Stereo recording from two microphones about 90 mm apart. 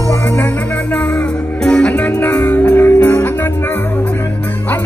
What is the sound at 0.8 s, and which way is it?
Music, 15° left (ahead or behind).